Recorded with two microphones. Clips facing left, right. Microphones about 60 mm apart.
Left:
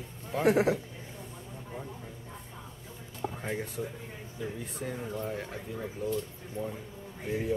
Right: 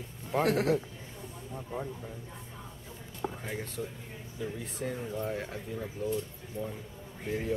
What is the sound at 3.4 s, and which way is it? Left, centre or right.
Speech, centre.